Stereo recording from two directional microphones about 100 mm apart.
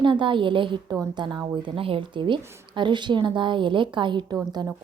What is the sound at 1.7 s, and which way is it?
A woman's voice, 65° right (ahead or behind).